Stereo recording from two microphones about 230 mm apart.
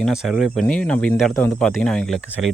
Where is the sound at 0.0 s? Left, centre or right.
Centre.